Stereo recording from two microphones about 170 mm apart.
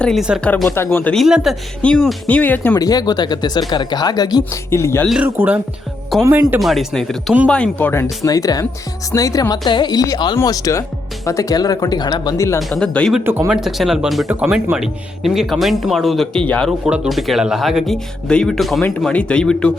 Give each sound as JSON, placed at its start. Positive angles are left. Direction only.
{"t": 0.0, "sound": "speech", "side_deg": 0}
{"t": 0.4, "sound": "speech", "side_deg": 10}
{"t": 2.7, "sound": "speech", "side_deg": 25}
{"t": 5.0, "sound": "speech", "side_deg": -5}
{"t": 6.6, "sound": "speech", "side_deg": 0}
{"t": 12.5, "sound": "speech", "side_deg": 0}
{"t": 13.1, "sound": "speech", "side_deg": -10}